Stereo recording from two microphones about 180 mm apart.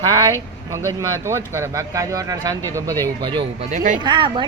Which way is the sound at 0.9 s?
15° right (ahead or behind).